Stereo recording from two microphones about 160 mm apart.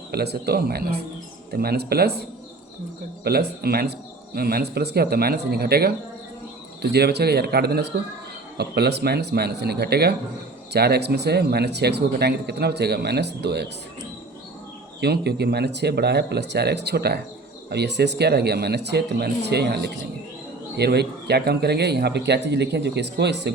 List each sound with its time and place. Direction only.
0.1 s speech: 85° right
3.2 s speech: 75° right (ahead or behind)
6.8 s speech: 90° right
8.5 s speech: 90° right
15.0 s speech: 90° right